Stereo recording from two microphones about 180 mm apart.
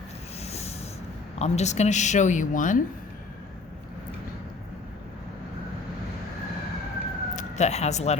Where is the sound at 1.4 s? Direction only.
40° left (ahead or behind).